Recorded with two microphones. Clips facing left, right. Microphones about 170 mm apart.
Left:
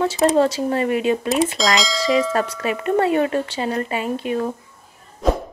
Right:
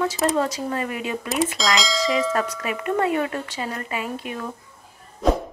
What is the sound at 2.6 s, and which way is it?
A woman's voice, 30° left (ahead or behind).